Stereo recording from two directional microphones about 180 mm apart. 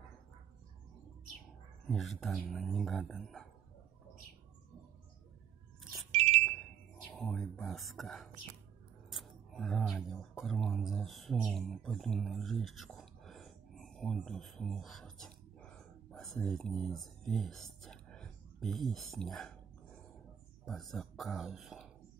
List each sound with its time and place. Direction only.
1.9 s speech: centre (ahead or behind)
6.1 s wind chime: 35° right (ahead or behind)
7.2 s speech: 5° left (ahead or behind)
20.6 s speech: centre (ahead or behind)